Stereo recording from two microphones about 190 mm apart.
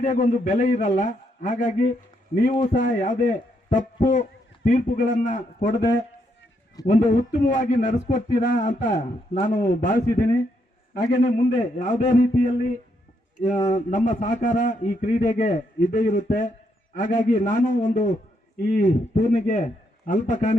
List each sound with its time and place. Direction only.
0.0 s a man's voice: 40° left (ahead or behind)
6.8 s a man's voice: 40° left (ahead or behind)